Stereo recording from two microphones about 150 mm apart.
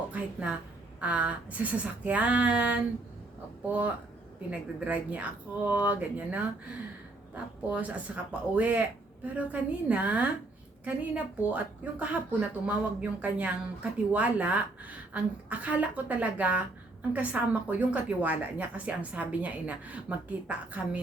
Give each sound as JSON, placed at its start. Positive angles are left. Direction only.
{"t": 0.1, "sound": "a woman's voice", "side_deg": -10}